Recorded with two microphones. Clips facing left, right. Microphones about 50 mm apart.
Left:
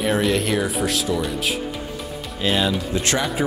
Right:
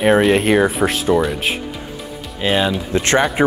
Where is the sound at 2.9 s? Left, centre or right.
Right.